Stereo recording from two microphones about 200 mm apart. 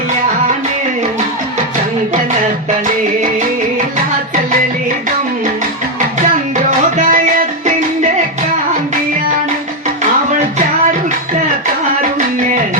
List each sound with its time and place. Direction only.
6.7 s music: 40° right (ahead or behind)